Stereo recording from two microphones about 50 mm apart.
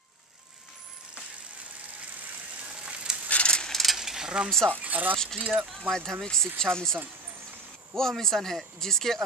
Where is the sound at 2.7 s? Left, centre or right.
Right.